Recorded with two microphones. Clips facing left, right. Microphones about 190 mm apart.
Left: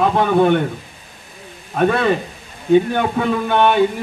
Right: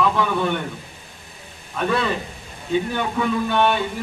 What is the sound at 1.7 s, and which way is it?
A man's voice, 55° left (ahead or behind).